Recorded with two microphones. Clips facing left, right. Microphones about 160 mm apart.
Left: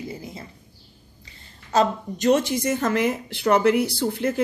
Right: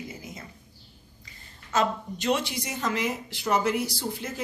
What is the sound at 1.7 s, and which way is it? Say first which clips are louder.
Speech: left 5 dB; 40° left (ahead or behind).